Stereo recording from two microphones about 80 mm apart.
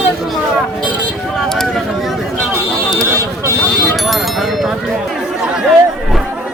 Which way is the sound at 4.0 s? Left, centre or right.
Centre.